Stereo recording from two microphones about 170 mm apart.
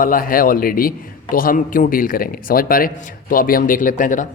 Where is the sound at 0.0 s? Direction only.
55° left (ahead or behind).